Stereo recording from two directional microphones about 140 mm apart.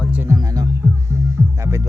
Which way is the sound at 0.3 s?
25° right (ahead or behind).